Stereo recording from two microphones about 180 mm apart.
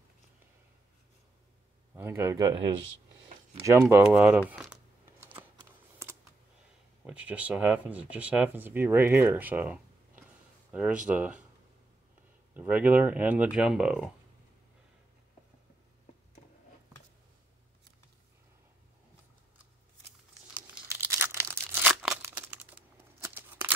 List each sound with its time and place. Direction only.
2.0 s speech: 15° right (ahead or behind)
3.9 s speech: 10° right (ahead or behind)
5.2 s a sound: 10° right (ahead or behind)
5.6 s computer keyboard: 15° right (ahead or behind)
7.1 s speech: 5° right (ahead or behind)
12.5 s speech: 10° right (ahead or behind)
20.9 s tearing: 15° right (ahead or behind)
22.2 s crumpling: 10° right (ahead or behind)